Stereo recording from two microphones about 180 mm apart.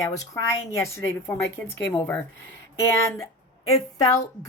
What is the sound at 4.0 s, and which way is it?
Speech, 20° left (ahead or behind).